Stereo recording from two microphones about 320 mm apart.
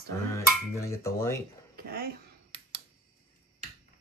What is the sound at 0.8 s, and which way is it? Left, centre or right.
Dishes, centre.